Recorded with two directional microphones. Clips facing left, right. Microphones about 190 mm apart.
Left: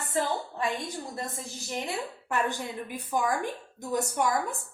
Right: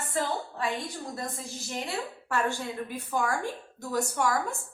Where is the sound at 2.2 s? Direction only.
20° left (ahead or behind).